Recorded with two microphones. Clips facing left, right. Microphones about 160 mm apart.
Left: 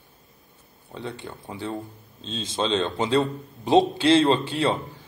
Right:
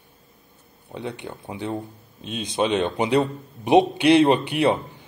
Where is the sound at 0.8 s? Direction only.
15° right (ahead or behind).